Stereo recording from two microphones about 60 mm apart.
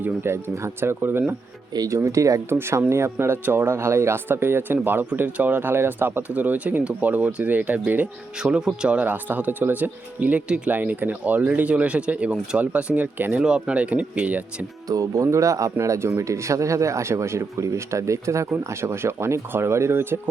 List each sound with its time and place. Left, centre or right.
0.2 s speech: right
1.7 s speech: right
2.0 s speech: right
2.5 s speech: right
4.3 s speech: right
8.4 s speech: centre
9.0 s speech: right
13.4 s speech: centre
14.8 s speech: right